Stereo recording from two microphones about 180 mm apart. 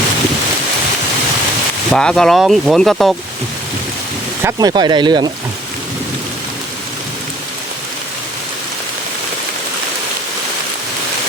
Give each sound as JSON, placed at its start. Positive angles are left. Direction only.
{"t": 1.9, "sound": "speech", "side_deg": 5}
{"t": 4.4, "sound": "speech", "side_deg": -20}